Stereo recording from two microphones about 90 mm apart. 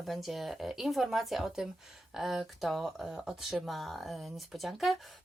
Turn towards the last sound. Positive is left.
turn(degrees=0)  # may be behind; listen again after turning